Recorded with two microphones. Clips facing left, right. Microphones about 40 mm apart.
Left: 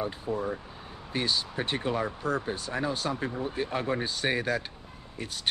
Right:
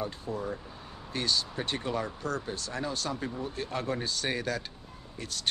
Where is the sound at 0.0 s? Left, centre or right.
Centre.